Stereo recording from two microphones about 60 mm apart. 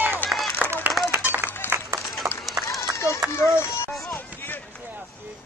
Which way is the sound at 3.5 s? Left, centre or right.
Left.